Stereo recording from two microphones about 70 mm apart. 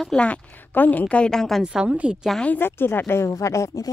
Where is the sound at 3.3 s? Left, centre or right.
Left.